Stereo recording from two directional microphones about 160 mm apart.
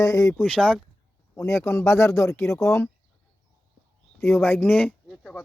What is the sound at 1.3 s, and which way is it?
Speech, 15° left (ahead or behind).